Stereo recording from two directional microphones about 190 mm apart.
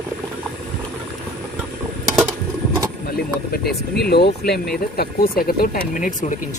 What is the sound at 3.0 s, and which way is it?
Vehicle, 55° left (ahead or behind).